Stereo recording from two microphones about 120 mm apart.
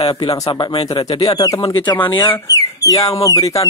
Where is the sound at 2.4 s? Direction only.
30° left (ahead or behind).